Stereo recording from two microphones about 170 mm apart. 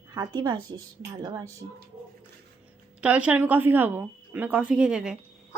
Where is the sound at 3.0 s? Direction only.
10° right (ahead or behind).